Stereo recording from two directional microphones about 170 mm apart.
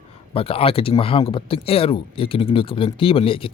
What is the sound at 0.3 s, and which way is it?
Speech, 35° left (ahead or behind).